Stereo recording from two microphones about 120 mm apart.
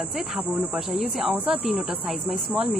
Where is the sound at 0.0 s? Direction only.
Centre (ahead or behind).